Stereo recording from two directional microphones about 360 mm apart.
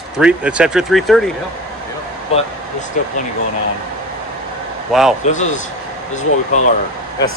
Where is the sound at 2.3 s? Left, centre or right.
Centre.